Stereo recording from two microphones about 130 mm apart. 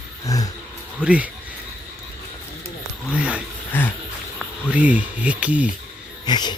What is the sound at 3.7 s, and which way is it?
Speech, 15° left (ahead or behind).